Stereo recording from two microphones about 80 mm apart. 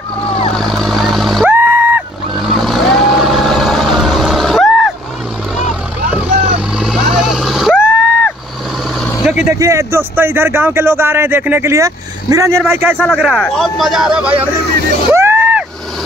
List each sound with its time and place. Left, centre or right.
0.3 s vehicle: centre
1.5 s a sound: right
2.3 s vehicle: centre
6.7 s vehicle: centre
7.7 s vehicle: left
9.2 s vehicle: centre
9.5 s speech: right
11.7 s speech: right
12.9 s speech: centre
15.1 s vehicle: right